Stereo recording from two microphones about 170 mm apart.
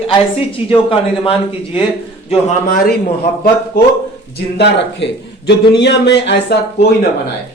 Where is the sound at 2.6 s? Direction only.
60° left (ahead or behind).